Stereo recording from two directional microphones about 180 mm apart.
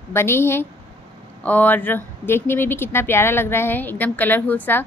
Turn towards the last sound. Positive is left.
turn(degrees=10)  # may be behind; listen again after turning